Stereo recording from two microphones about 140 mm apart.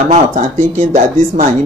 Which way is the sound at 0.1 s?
60° right (ahead or behind).